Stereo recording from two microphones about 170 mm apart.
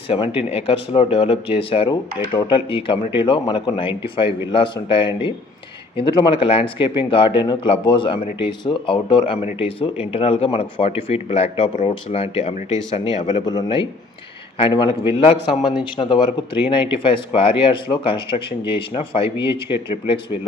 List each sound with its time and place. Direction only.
0.1 s a man's voice: 35° left (ahead or behind)
13.2 s a man's voice: 25° left (ahead or behind)